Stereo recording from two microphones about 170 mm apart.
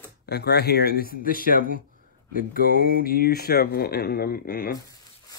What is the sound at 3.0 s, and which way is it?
Speech, 65° left (ahead or behind).